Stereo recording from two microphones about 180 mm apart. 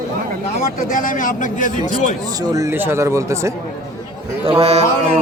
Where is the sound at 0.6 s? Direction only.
50° left (ahead or behind).